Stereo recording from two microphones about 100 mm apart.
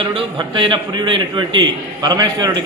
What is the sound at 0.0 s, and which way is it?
A man's voice, 55° right (ahead or behind).